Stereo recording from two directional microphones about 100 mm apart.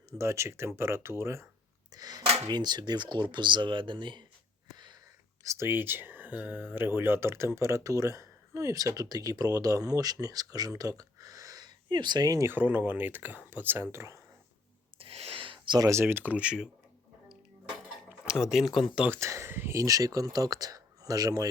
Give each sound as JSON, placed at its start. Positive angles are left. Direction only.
{"t": 0.2, "sound": "speech", "side_deg": -25}
{"t": 1.9, "sound": "a sound", "side_deg": -40}
{"t": 2.5, "sound": "speech", "side_deg": -45}
{"t": 5.4, "sound": "speech", "side_deg": -30}
{"t": 12.5, "sound": "speech", "side_deg": -20}
{"t": 14.9, "sound": "a sound", "side_deg": -80}
{"t": 15.9, "sound": "speech", "side_deg": -25}
{"t": 18.3, "sound": "speech", "side_deg": -5}
{"t": 19.1, "sound": "speech", "side_deg": -30}